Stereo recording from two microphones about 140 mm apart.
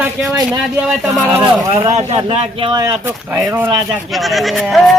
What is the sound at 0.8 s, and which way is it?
Whip, 5° right (ahead or behind).